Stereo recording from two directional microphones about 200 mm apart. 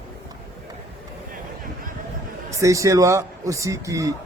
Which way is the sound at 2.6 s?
15° right (ahead or behind).